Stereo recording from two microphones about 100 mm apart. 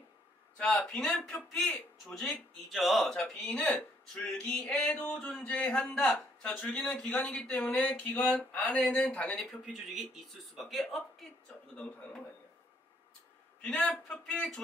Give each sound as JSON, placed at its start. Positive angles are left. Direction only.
{"t": 0.6, "sound": "speech", "side_deg": 10}
{"t": 9.4, "sound": "speech", "side_deg": 0}
{"t": 11.7, "sound": "speech", "side_deg": 10}
{"t": 13.6, "sound": "speech", "side_deg": 10}